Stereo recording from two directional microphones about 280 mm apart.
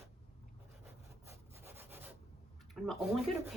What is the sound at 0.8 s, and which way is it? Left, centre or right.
Rub, centre.